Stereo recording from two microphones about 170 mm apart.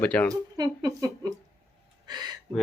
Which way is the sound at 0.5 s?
20° right (ahead or behind).